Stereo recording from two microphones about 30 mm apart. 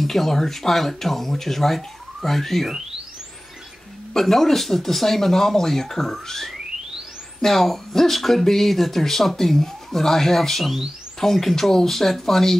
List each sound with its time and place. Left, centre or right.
0.0 s speech: centre
4.2 s speech: centre